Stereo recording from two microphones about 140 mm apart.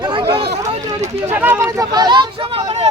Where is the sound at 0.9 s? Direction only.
50° right (ahead or behind).